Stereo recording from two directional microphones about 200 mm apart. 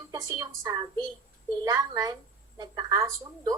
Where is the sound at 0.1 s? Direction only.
15° right (ahead or behind).